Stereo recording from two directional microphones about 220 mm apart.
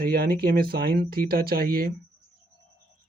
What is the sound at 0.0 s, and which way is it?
Speech, 40° right (ahead or behind).